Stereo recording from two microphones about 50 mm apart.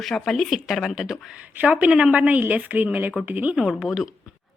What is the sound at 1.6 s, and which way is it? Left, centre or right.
A woman's voice, right.